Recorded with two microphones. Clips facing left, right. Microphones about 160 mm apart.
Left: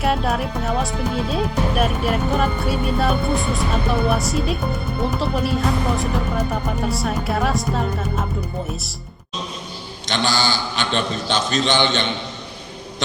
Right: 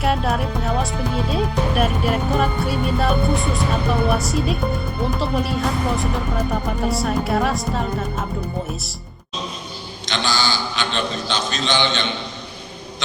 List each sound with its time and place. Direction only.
0.0 s speech: centre (ahead or behind)
10.1 s a man's voice: 50° left (ahead or behind)